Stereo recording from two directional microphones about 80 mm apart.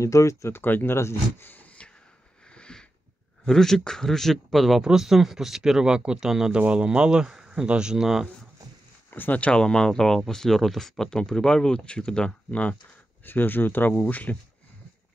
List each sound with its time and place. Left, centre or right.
0.0 s speech: left
2.5 s sniff: centre
3.4 s speech: centre
9.1 s speech: left